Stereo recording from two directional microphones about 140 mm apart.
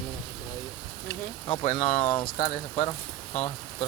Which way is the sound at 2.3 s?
65° left (ahead or behind).